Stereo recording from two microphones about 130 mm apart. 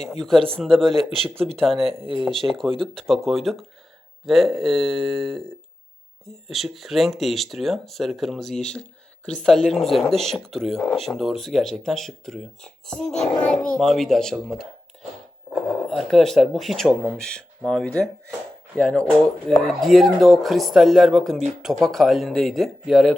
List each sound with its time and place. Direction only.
0.3 s speech: 45° right (ahead or behind)
0.6 s speech: centre (ahead or behind)
1.9 s speech: 45° right (ahead or behind)
2.2 s speech: centre (ahead or behind)
6.5 s speech: centre (ahead or behind)
15.9 s speech: centre (ahead or behind)